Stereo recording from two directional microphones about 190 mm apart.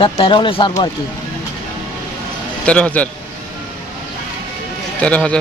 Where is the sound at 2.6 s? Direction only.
5° left (ahead or behind).